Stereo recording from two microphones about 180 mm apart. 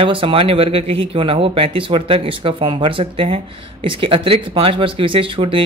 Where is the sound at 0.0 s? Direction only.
30° right (ahead or behind).